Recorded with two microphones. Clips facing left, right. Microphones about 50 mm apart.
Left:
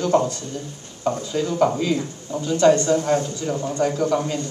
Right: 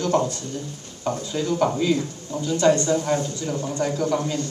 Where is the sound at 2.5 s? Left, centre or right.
Left.